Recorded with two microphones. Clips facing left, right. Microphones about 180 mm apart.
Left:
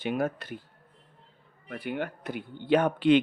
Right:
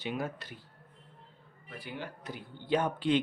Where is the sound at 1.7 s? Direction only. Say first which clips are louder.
Left 9 dB; 60° left (ahead or behind).